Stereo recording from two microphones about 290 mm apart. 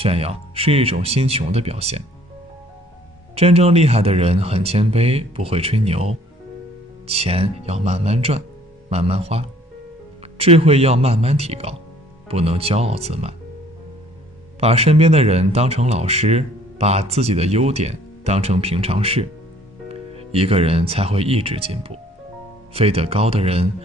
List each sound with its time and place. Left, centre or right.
0.0 s speech: right
3.3 s speech: right
14.6 s speech: right